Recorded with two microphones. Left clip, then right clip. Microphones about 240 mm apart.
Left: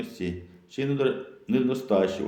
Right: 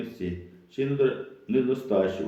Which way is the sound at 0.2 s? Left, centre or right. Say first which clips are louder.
Left 1 dB; left.